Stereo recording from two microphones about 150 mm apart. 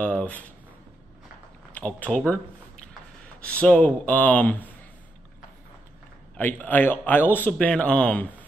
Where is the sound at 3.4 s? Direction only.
10° left (ahead or behind).